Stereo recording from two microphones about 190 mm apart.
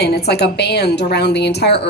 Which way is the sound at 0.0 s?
60° left (ahead or behind).